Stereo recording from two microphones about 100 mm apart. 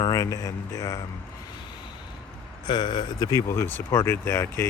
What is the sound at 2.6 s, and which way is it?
Speech, 50° left (ahead or behind).